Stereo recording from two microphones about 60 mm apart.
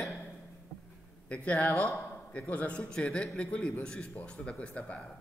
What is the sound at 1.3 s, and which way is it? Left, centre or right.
A man's voice, left.